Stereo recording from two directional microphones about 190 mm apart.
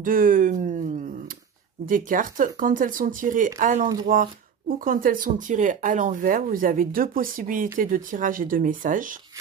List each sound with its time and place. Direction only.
0.0 s speech: 45° right (ahead or behind)
1.9 s speech: 45° right (ahead or behind)